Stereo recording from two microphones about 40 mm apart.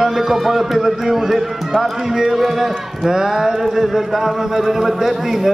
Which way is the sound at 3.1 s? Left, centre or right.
Centre.